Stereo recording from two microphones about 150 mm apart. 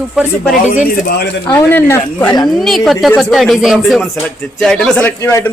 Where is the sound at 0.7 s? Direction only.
70° left (ahead or behind).